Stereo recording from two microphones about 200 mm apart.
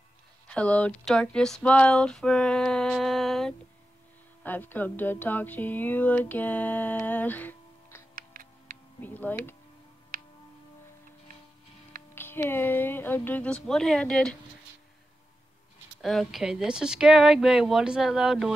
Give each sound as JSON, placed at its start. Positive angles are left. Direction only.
{"t": 0.5, "sound": "a sound", "side_deg": 5}
{"t": 4.4, "sound": "speech", "side_deg": 10}
{"t": 8.1, "sound": "music", "side_deg": -45}
{"t": 9.0, "sound": "speech", "side_deg": 10}
{"t": 10.1, "sound": "music", "side_deg": -45}
{"t": 12.2, "sound": "speech", "side_deg": 10}
{"t": 16.0, "sound": "speech", "side_deg": 0}